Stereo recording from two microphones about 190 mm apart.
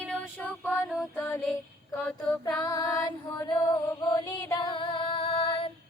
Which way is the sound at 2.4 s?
20° left (ahead or behind).